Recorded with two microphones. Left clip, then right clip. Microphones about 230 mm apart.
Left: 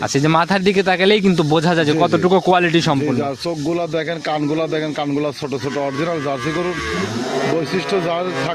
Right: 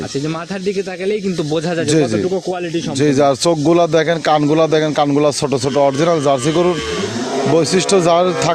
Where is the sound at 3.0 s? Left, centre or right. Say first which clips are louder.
Right 8 dB; right.